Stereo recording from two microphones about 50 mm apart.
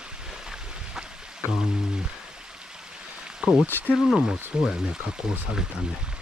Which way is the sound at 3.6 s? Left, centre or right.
Left.